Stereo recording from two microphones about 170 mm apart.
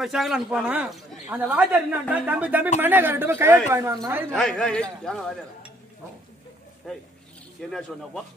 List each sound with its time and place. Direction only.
0.0 s speech: centre (ahead or behind); by 4.3 s 15° right (ahead or behind)
4.3 s a man's voice: 5° left (ahead or behind)
6.8 s a man's voice: centre (ahead or behind)